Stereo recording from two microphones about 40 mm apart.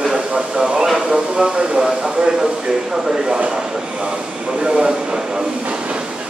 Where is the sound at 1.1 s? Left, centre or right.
Right.